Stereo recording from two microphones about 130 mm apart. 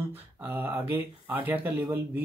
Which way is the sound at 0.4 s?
15° right (ahead or behind).